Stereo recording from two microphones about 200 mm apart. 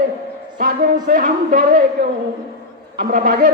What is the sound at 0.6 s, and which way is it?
A man's voice, 45° right (ahead or behind).